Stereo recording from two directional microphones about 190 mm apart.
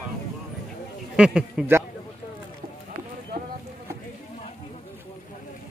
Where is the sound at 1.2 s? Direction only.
5° right (ahead or behind).